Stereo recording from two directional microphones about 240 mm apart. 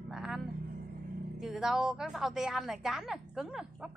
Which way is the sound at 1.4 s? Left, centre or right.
Centre.